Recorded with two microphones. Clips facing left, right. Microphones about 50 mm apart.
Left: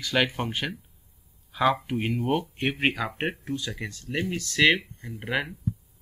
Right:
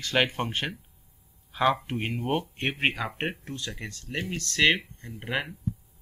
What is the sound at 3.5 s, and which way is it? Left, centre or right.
Speech, centre.